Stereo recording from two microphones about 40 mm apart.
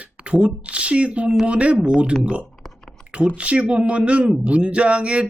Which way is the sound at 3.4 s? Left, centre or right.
Right.